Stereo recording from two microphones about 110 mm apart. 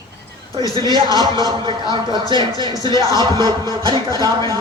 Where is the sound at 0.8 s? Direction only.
45° right (ahead or behind).